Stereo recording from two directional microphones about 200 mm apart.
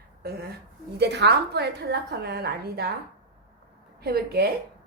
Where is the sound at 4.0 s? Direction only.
50° right (ahead or behind).